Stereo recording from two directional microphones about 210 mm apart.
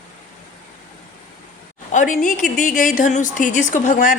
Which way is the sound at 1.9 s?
35° left (ahead or behind).